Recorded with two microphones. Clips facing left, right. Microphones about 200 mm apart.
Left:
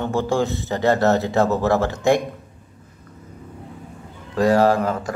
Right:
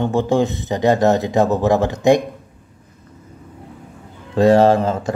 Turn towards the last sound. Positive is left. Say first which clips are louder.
# right 4 dB
turn(degrees=-25)  # may be behind; listen again after turning